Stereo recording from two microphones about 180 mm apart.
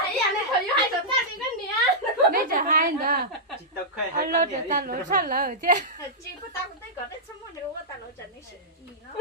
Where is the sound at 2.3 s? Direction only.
50° right (ahead or behind).